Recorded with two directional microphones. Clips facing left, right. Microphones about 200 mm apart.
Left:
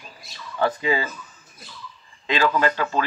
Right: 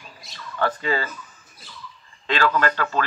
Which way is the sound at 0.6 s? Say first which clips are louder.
Left 2 dB; 10° left (ahead or behind).